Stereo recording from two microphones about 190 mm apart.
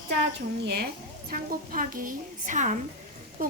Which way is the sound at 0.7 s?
55° right (ahead or behind).